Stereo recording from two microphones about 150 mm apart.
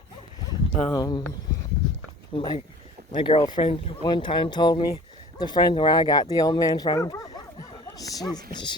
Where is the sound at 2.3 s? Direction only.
30° left (ahead or behind).